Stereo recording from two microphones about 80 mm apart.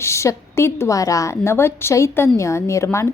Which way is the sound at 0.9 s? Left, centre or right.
Left.